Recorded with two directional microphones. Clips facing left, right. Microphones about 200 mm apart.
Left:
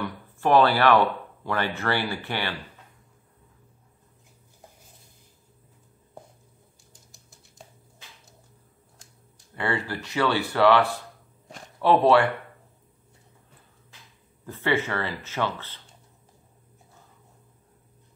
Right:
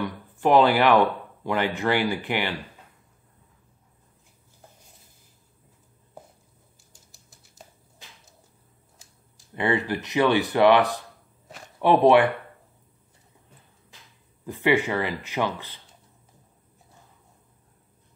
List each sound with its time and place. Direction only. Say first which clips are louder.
0.0 s speech: right 3 dB; 15° right (ahead or behind)
6.9 s typewriter: left 1 dB; centre (ahead or behind)
9.6 s speech: right 4 dB; 20° right (ahead or behind)
14.4 s speech: right 4 dB; 15° right (ahead or behind)